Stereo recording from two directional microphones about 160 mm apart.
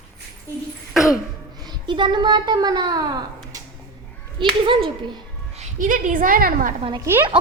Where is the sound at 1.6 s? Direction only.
30° right (ahead or behind).